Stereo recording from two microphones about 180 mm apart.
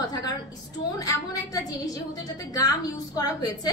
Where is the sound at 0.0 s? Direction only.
20° left (ahead or behind).